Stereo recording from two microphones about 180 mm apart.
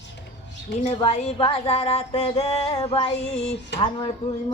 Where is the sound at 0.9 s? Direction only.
35° left (ahead or behind).